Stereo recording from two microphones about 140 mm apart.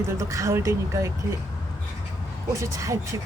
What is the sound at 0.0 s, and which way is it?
Speech, 20° right (ahead or behind).